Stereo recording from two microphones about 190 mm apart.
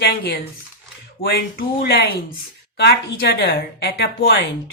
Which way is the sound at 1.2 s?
55° left (ahead or behind).